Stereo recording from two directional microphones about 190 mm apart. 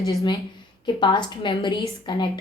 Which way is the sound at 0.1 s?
15° left (ahead or behind).